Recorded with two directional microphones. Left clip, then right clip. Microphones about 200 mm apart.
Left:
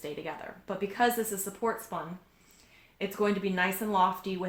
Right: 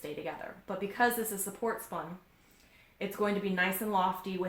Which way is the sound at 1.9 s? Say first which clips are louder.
Left 2 dB; 30° left (ahead or behind).